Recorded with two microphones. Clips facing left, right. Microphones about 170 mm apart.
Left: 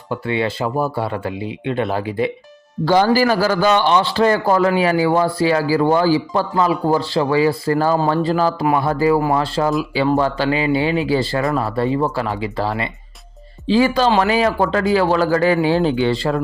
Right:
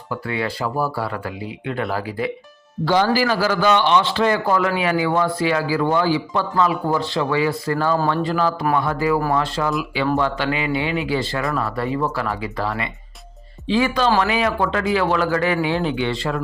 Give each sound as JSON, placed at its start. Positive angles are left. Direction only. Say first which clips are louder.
{"t": 0.1, "sound": "speech", "louder": "left 4 dB", "side_deg": 25}
{"t": 2.8, "sound": "a man's voice", "louder": "left 4 dB", "side_deg": 45}